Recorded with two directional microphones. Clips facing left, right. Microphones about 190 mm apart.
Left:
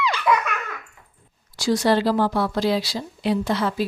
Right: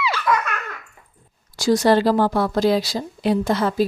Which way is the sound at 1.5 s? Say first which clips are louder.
Right 3 dB; 45° right (ahead or behind).